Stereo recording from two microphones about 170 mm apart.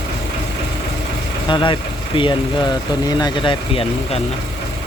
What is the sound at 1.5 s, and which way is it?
Speech, 30° left (ahead or behind).